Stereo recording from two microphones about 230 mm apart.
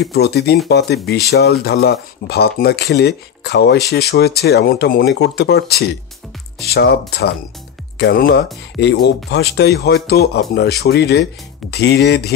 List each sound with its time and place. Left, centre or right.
0.0 s speech: left